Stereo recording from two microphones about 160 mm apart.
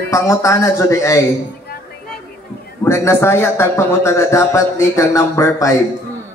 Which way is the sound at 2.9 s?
15° left (ahead or behind).